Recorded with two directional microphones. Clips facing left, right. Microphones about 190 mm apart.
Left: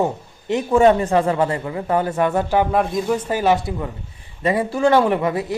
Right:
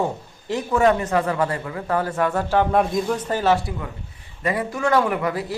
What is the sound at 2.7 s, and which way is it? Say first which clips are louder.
Speech: left 1 dB; centre (ahead or behind).